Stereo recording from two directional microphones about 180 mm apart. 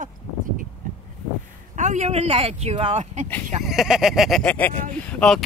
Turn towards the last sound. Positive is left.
turn(degrees=5)  # may be behind; listen again after turning